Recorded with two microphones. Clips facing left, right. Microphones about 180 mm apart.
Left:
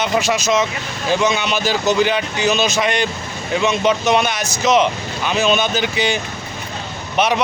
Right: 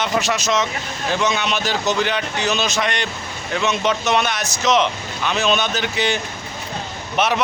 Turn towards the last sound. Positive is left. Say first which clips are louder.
# left 2 dB
turn(degrees=0)  # may be behind; listen again after turning